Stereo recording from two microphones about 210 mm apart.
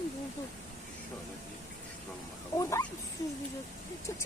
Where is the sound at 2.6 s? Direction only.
15° left (ahead or behind).